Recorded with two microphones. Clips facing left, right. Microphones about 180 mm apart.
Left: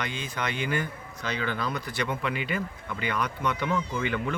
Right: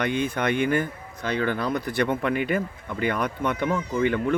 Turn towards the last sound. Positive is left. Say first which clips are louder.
# right 6 dB
turn(degrees=-50)  # may be behind; listen again after turning